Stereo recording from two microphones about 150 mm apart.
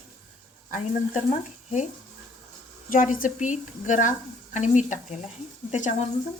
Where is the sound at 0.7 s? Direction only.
50° left (ahead or behind).